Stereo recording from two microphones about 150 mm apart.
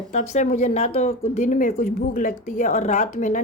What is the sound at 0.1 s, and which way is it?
Speech, 50° left (ahead or behind).